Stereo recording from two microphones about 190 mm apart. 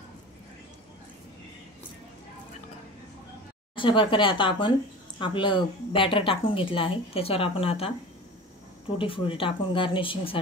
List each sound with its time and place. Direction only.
3.7 s speech: 25° left (ahead or behind)
8.9 s speech: 30° left (ahead or behind)